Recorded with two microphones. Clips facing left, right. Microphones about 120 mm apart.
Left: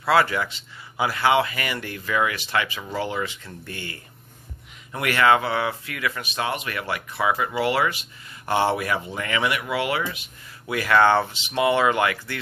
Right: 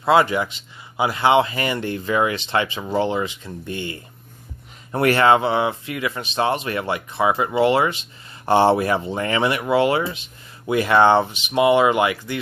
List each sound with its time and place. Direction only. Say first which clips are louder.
0.0 s speech: right 4 dB; 20° right (ahead or behind)
4.9 s speech: right 4 dB; 35° right (ahead or behind); by 12.4 s 20° right (ahead or behind)